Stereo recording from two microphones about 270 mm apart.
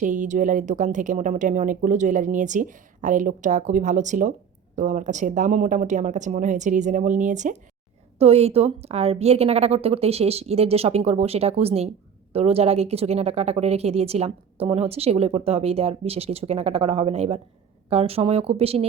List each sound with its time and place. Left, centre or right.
0.0 s a woman's voice: right